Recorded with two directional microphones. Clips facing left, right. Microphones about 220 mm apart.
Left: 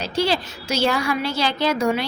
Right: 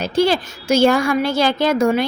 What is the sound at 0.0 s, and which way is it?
A woman's voice, 50° right (ahead or behind).